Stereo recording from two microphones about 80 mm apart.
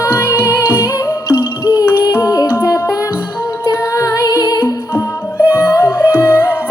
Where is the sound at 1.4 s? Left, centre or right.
Left.